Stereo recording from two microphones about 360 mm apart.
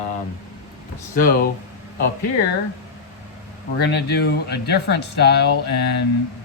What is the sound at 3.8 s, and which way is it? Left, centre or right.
Speech, left.